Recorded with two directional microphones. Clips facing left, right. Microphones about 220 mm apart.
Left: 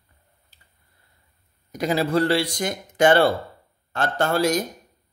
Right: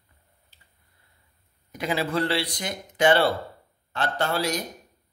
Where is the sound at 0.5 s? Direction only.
40° left (ahead or behind).